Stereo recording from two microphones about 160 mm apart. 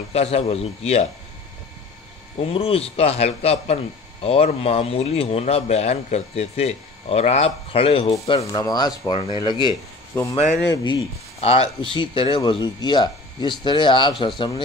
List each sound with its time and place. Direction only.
0.1 s speech: 40° left (ahead or behind)
2.3 s speech: 35° left (ahead or behind)
10.3 s speech: 45° left (ahead or behind)